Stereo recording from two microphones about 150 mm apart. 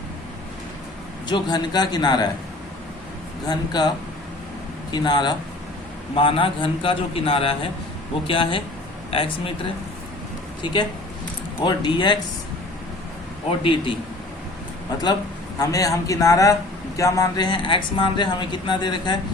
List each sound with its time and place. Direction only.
1.3 s a man's voice: 30° left (ahead or behind)
3.4 s a man's voice: 30° left (ahead or behind)
10.6 s speech: 30° left (ahead or behind)
13.6 s speech: 35° left (ahead or behind)
15.5 s a man's voice: 25° left (ahead or behind)